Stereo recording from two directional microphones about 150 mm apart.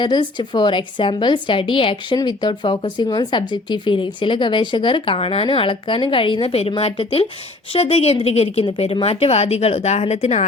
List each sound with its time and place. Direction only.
0.0 s a woman's voice: 30° left (ahead or behind); by 10.4 s 45° left (ahead or behind)